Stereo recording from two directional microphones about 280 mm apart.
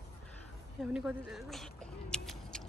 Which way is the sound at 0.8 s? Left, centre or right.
Centre.